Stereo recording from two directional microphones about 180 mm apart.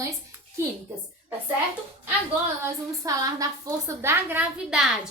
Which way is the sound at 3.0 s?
20° right (ahead or behind).